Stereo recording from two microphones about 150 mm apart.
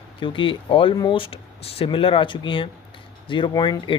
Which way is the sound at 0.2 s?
35° left (ahead or behind).